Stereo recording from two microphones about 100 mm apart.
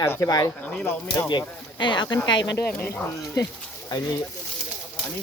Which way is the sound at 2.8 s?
20° left (ahead or behind).